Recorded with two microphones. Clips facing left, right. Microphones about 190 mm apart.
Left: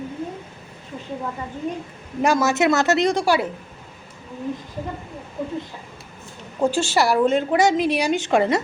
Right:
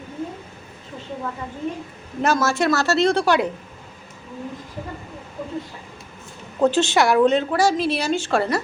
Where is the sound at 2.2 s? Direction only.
15° left (ahead or behind).